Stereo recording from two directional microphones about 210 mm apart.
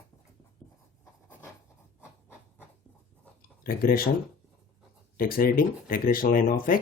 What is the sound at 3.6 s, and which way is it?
Speech, 45° left (ahead or behind).